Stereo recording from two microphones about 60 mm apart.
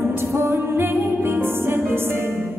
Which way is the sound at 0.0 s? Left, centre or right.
Right.